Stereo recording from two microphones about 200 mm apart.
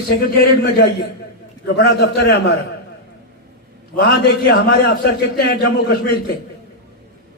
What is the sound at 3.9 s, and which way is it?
A man's voice, 55° left (ahead or behind).